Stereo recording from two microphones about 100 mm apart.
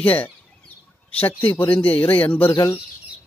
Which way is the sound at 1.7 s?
15° left (ahead or behind).